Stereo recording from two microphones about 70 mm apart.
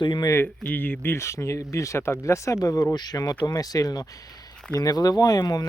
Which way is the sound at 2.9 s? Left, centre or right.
Left.